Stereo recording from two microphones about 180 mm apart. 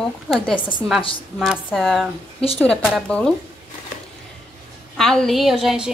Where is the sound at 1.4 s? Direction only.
Centre (ahead or behind).